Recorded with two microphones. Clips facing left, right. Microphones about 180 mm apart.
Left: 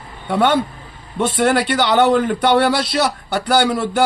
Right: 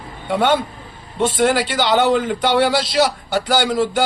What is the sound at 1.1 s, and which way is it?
A man's voice, 60° left (ahead or behind).